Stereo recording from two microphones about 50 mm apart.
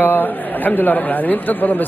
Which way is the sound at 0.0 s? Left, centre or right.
Left.